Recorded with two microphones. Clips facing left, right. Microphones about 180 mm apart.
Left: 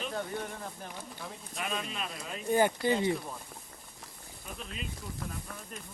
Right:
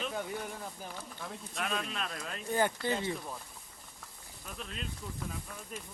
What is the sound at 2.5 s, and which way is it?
Speech, 15° left (ahead or behind).